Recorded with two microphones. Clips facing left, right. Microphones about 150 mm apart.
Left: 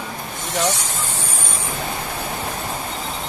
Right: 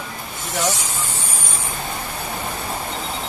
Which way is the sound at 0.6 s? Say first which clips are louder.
Left 1 dB; 10° right (ahead or behind).